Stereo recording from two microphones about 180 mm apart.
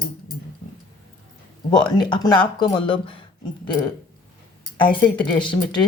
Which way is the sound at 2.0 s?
25° left (ahead or behind).